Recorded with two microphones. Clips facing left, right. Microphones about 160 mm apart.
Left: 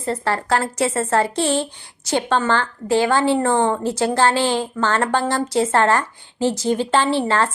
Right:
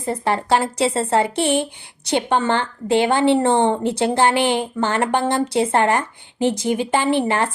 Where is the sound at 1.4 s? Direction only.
60° right (ahead or behind).